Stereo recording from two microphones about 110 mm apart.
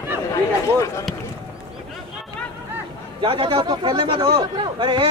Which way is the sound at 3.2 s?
55° right (ahead or behind).